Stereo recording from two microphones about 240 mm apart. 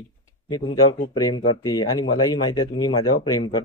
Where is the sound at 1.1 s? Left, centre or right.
Centre.